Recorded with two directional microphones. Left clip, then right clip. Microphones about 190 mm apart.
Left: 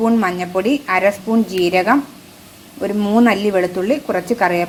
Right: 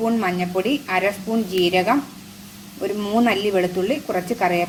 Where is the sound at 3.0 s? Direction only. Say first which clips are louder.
Left 5 dB; 15° left (ahead or behind).